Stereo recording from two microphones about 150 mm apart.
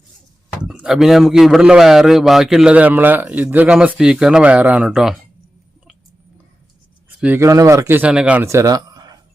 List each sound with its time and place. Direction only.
0.7 s a man's voice: 5° right (ahead or behind)
7.2 s speech: 15° right (ahead or behind)
8.4 s a sound: 20° right (ahead or behind)